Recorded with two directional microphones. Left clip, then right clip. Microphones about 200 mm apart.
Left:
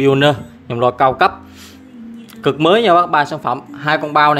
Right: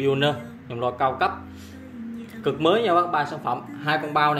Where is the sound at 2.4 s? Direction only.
60° left (ahead or behind).